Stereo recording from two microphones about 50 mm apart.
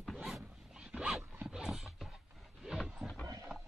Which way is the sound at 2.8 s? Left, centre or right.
Centre.